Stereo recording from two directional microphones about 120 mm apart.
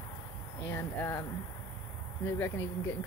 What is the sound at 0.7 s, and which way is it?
Speech, 20° left (ahead or behind).